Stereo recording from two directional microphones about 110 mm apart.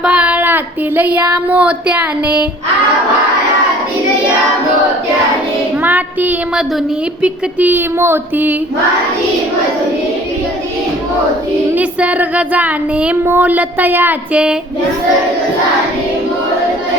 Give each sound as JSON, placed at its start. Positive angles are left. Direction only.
{"t": 0.0, "sound": "a sound", "side_deg": -10}
{"t": 5.8, "sound": "child singing", "side_deg": -15}
{"t": 11.7, "sound": "child singing", "side_deg": -10}